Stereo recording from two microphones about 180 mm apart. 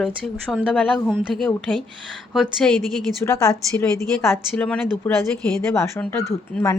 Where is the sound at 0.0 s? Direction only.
5° left (ahead or behind).